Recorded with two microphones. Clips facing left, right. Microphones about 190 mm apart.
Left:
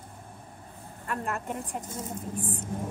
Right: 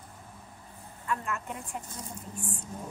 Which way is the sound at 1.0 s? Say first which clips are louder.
Left 1 dB; 55° left (ahead or behind).